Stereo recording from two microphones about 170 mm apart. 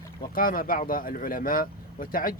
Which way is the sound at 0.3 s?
55° left (ahead or behind).